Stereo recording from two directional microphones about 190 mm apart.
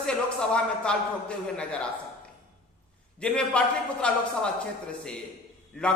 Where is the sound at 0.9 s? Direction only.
5° left (ahead or behind).